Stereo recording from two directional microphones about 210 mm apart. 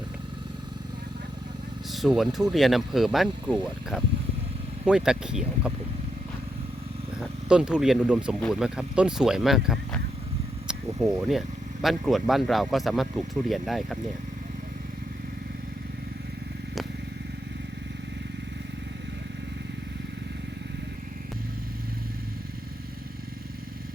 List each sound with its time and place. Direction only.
1.9 s speech: centre (ahead or behind)
7.2 s speech: 5° right (ahead or behind)